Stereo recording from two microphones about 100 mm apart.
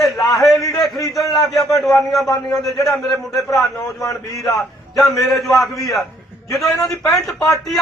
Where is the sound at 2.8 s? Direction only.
Centre (ahead or behind).